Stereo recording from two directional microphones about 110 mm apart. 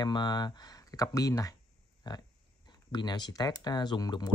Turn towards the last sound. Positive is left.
turn(degrees=40)  # may be behind; listen again after turning